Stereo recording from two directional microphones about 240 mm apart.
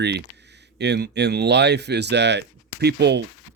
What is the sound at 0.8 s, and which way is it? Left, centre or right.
Speech, right.